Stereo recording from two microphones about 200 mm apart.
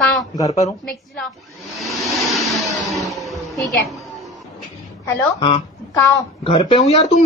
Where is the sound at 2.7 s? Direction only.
Centre (ahead or behind).